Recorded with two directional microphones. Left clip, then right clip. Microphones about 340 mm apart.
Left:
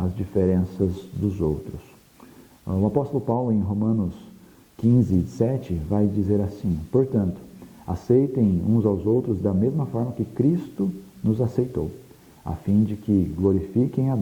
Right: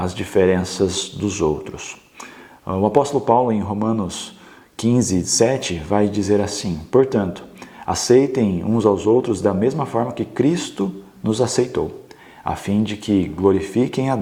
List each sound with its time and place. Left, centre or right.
0.0 s speech: centre
2.6 s a man's voice: centre
11.3 s a man's voice: centre